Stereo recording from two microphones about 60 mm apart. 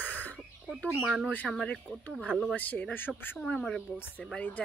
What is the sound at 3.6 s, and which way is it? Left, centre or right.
Speech, centre.